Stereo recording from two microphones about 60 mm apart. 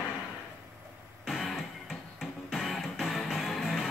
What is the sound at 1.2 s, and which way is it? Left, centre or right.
Music, centre.